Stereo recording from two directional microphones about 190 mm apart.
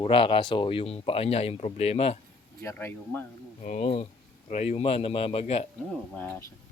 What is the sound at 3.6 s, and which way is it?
A man's voice, 35° left (ahead or behind).